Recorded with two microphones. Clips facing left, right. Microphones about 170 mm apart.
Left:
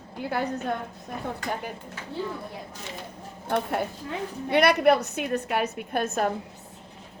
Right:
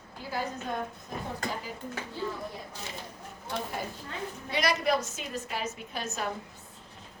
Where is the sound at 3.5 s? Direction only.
60° left (ahead or behind).